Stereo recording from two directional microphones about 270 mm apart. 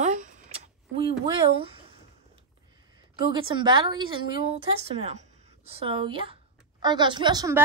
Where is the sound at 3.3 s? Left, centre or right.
Centre.